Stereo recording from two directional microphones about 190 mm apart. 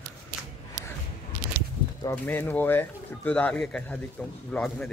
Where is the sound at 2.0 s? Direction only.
10° left (ahead or behind).